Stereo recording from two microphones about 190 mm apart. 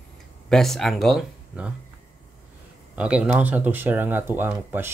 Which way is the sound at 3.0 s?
5° right (ahead or behind).